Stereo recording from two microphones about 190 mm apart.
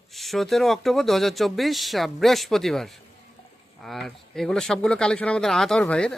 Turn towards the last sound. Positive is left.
turn(degrees=5)  # may be behind; listen again after turning